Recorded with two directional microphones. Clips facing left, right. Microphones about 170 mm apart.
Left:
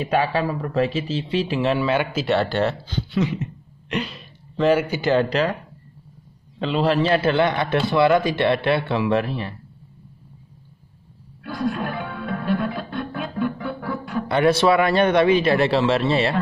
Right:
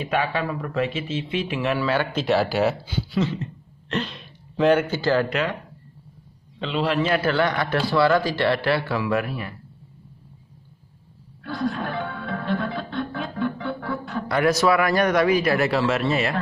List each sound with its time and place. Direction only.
0.0 s speech: 35° left (ahead or behind)
1.8 s speech: 20° left (ahead or behind)
2.1 s speech: centre (ahead or behind)
3.9 s speech: 10° left (ahead or behind)
5.3 s speech: 40° left (ahead or behind)
6.6 s a man's voice: 40° left (ahead or behind)
11.4 s music: 10° left (ahead or behind)
14.2 s a man's voice: 25° left (ahead or behind)